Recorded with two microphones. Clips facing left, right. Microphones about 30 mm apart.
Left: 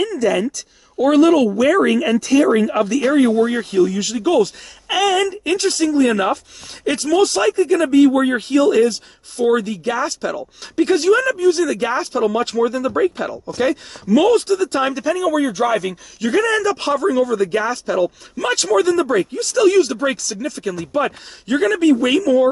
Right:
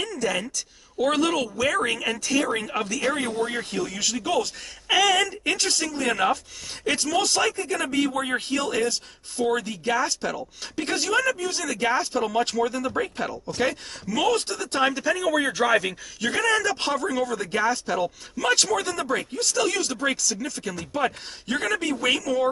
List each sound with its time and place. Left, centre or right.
0.0 s a woman's voice: centre
3.7 s speech: centre
14.7 s speech: centre
15.3 s speech: centre
16.2 s speech: centre